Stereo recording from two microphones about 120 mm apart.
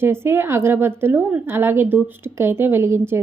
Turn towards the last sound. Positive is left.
turn(degrees=-20)  # may be behind; listen again after turning